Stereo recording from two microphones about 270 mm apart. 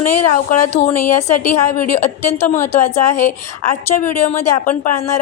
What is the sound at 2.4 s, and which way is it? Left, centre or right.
Speech, centre.